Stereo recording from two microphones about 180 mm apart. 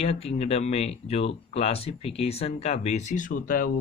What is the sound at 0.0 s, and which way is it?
Speech, 35° left (ahead or behind).